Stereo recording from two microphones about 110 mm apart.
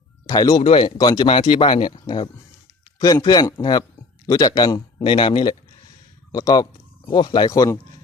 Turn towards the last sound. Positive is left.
turn(degrees=25)  # may be behind; listen again after turning